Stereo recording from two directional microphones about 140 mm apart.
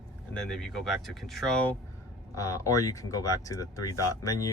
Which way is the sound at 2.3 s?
25° left (ahead or behind).